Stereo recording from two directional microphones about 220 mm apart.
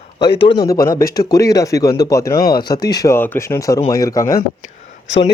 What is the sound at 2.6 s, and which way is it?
A man's voice, 15° left (ahead or behind).